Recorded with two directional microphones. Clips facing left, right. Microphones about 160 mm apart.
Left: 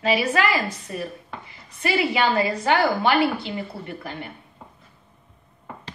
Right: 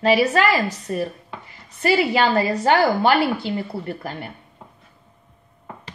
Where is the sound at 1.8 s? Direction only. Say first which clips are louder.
Right 3 dB; 40° right (ahead or behind).